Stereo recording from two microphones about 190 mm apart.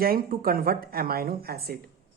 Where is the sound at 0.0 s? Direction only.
50° right (ahead or behind).